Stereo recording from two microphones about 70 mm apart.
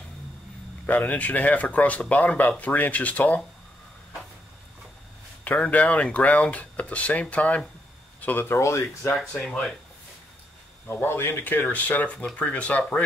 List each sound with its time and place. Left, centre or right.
0.8 s speech: left
5.4 s speech: left
8.5 s speech: left
9.3 s speech: centre
10.9 s speech: left